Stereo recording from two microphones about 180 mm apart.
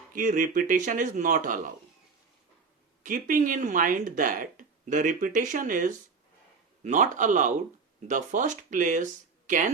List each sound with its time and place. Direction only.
0.1 s speech: 50° right (ahead or behind)
3.0 s speech: 45° right (ahead or behind)